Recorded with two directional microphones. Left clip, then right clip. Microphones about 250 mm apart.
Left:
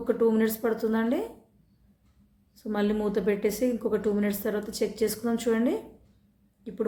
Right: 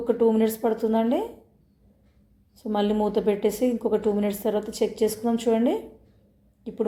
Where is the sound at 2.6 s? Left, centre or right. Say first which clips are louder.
Right 4 dB; centre.